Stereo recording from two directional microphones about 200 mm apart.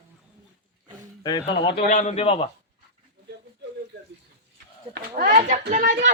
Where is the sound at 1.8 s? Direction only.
40° left (ahead or behind).